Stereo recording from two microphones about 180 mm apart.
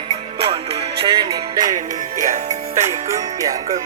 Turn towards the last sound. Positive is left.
turn(degrees=-20)  # may be behind; listen again after turning